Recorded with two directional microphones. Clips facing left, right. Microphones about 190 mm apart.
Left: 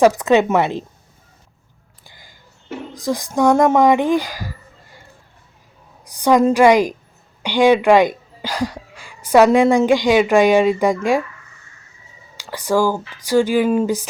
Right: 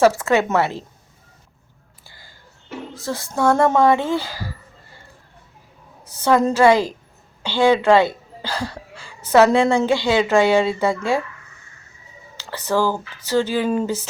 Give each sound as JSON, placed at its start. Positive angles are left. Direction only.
{"t": 0.0, "sound": "speech", "side_deg": 20}
{"t": 2.0, "sound": "a sound", "side_deg": 15}
{"t": 2.9, "sound": "speech", "side_deg": 15}
{"t": 6.1, "sound": "speech", "side_deg": 15}
{"t": 12.4, "sound": "speech", "side_deg": 10}